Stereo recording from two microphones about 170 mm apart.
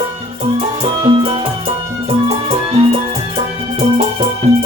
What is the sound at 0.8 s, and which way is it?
Music, 35° right (ahead or behind).